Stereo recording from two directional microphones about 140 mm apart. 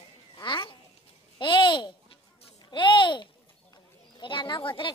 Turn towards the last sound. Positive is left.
turn(degrees=35)  # may be behind; listen again after turning